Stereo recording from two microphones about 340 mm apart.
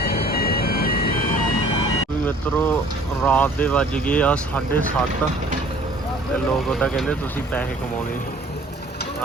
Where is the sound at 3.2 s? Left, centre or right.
Centre.